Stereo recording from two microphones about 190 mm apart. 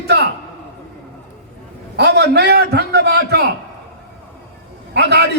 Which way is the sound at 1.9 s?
60° right (ahead or behind).